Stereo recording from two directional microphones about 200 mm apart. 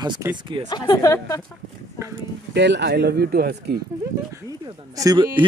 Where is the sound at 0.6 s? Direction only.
20° left (ahead or behind).